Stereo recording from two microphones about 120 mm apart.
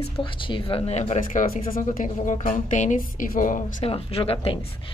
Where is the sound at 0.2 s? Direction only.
45° left (ahead or behind); by 3.6 s 90° left.